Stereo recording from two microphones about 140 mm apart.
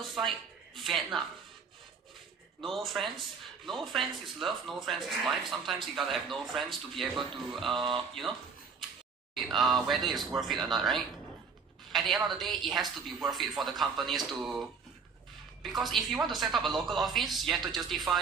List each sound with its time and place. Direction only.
0.0 s speech: centre (ahead or behind)
2.6 s speech: centre (ahead or behind)
9.3 s speech: centre (ahead or behind)